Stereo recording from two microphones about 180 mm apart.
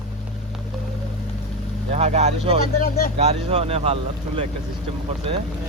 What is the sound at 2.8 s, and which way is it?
Speech, 55° left (ahead or behind).